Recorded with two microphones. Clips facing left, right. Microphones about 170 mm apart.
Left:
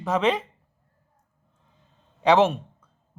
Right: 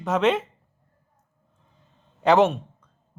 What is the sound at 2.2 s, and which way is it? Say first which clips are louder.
Speech: right 1 dB; centre (ahead or behind).